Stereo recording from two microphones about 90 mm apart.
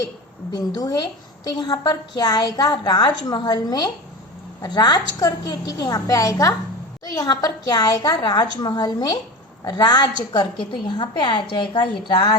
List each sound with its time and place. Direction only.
0.5 s a woman's voice: 45° left (ahead or behind)